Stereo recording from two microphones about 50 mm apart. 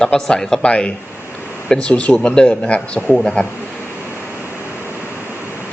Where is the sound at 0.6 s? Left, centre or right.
Left.